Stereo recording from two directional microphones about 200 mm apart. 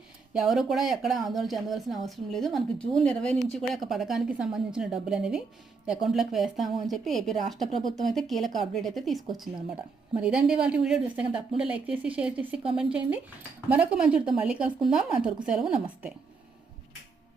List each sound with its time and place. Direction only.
0.3 s speech: centre (ahead or behind)